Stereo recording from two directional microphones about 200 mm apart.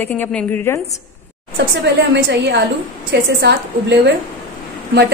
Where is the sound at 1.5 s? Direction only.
55° right (ahead or behind).